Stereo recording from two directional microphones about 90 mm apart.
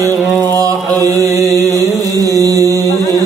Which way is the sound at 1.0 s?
40° right (ahead or behind).